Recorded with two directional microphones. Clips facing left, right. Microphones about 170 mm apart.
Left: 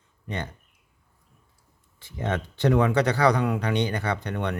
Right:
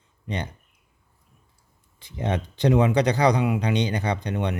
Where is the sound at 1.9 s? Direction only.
20° right (ahead or behind).